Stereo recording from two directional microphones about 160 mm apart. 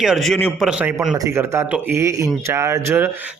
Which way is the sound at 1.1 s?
20° right (ahead or behind).